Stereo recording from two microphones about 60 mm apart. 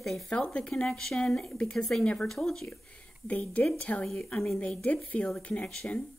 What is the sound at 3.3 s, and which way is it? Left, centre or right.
Speech, left.